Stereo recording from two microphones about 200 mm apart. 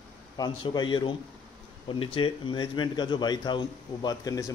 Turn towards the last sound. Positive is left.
turn(degrees=15)  # may be behind; listen again after turning